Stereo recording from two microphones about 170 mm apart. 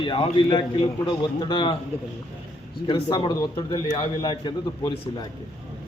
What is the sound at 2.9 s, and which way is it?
A man's voice, 30° left (ahead or behind).